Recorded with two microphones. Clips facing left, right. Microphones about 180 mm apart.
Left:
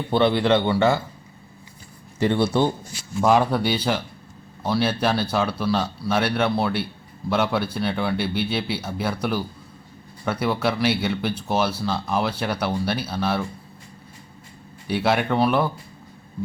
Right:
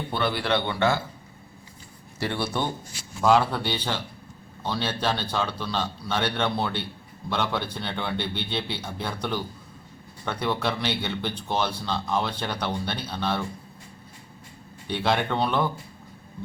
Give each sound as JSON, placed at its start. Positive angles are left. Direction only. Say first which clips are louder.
{"t": 0.1, "sound": "speech", "louder": "left 8 dB", "side_deg": 25}
{"t": 2.1, "sound": "speech", "louder": "left 8 dB", "side_deg": 20}
{"t": 14.8, "sound": "speech", "louder": "left 4 dB", "side_deg": 5}